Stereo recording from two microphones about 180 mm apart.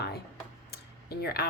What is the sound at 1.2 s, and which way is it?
Speech, 60° left (ahead or behind).